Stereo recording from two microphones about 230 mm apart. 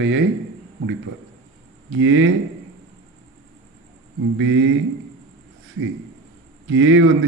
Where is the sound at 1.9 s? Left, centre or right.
Right.